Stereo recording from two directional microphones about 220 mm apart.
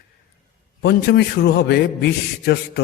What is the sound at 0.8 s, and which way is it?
A man's voice, 50° left (ahead or behind).